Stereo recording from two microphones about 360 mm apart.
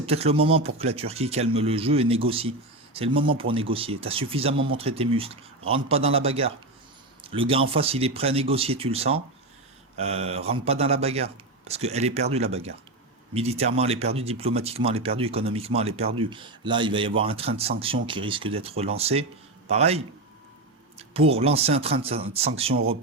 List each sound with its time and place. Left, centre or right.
0.0 s speech: centre
21.1 s speech: centre